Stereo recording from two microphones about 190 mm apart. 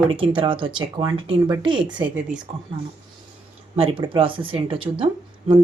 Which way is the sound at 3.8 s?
25° right (ahead or behind).